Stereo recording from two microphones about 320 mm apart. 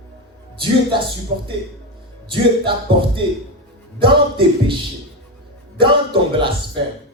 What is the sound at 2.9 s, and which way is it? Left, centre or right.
Speech, centre.